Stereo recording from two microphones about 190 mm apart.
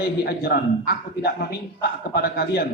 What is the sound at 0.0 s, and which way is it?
A man's voice, 55° left (ahead or behind).